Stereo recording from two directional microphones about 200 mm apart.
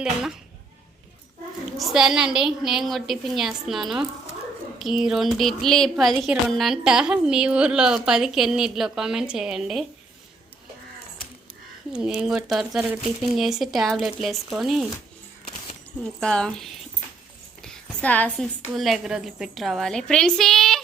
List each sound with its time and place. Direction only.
0.0 s a woman's voice: centre (ahead or behind)
1.8 s a woman's voice: centre (ahead or behind)
5.0 s a woman's voice: centre (ahead or behind)
11.9 s a woman's voice: 5° right (ahead or behind)
15.4 s a sound: 35° left (ahead or behind)
16.2 s a woman's voice: 5° left (ahead or behind)